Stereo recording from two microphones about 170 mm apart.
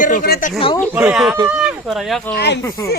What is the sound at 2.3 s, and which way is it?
Speech, 85° left.